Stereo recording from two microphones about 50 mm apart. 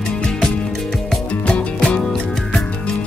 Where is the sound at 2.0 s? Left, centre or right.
Centre.